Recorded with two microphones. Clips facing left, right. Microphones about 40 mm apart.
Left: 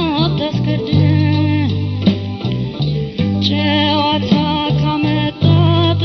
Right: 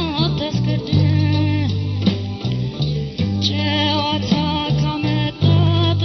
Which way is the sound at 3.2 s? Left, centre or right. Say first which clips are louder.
Left 6 dB; left.